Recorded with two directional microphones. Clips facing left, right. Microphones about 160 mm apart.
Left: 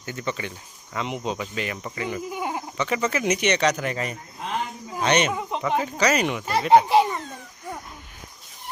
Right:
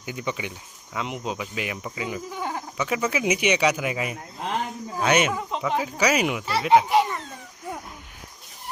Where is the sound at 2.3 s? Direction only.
15° left (ahead or behind).